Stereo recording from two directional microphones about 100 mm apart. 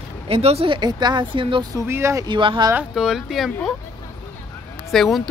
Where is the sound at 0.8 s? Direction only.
45° right (ahead or behind).